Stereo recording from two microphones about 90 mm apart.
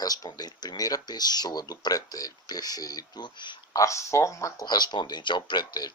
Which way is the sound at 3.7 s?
35° left (ahead or behind).